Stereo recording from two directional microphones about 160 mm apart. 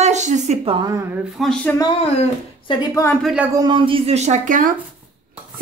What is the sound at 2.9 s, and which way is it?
Speech, 15° left (ahead or behind).